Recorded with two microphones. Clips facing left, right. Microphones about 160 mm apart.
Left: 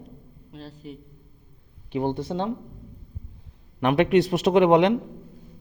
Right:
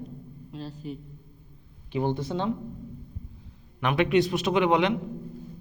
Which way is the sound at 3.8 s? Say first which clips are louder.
Left 4 dB; 40° left (ahead or behind).